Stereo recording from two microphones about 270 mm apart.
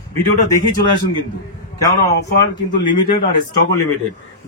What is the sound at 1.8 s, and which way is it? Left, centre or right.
Speech, centre.